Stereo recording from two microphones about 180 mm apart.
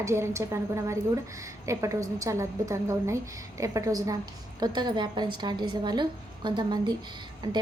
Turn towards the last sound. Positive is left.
turn(degrees=-25)  # may be behind; listen again after turning